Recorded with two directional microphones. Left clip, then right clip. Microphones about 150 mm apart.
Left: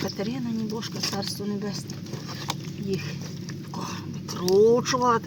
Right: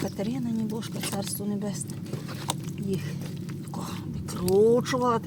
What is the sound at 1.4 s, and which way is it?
Speech, 5° right (ahead or behind).